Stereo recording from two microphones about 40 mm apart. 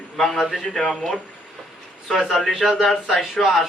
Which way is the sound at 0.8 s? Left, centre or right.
Centre.